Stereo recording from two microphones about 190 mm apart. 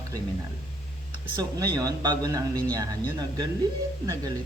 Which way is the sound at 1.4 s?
20° right (ahead or behind).